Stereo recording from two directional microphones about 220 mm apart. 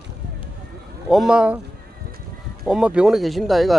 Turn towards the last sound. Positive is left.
turn(degrees=0)  # may be behind; listen again after turning